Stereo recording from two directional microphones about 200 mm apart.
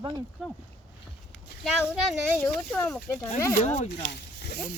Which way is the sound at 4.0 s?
50° left (ahead or behind).